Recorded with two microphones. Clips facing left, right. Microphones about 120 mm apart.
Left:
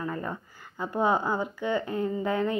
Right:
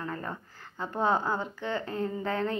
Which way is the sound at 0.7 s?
10° left (ahead or behind).